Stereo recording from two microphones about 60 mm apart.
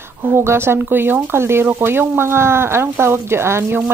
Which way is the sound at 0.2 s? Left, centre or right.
Right.